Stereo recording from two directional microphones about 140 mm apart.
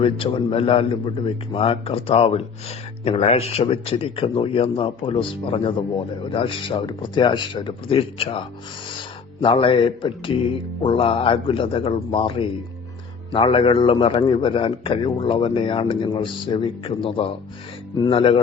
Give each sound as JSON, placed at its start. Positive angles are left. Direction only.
{"t": 0.0, "sound": "a man's voice", "side_deg": 40}
{"t": 9.4, "sound": "a man's voice", "side_deg": 40}